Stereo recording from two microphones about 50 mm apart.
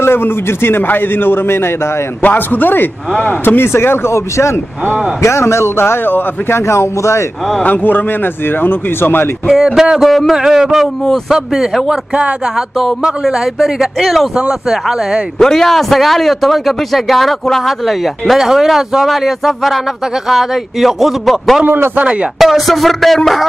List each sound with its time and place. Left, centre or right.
0.0 s a man's voice: left
2.2 s speech: left
3.4 s a man's voice: left
6.7 s speech: left
7.6 s speech: left
9.5 s a man's voice: centre
10.0 s a man's voice: centre
10.3 s a man's voice: centre
13.6 s a man's voice: centre
15.3 s a man's voice: centre
21.6 s a man's voice: right
22.4 s a man's voice: centre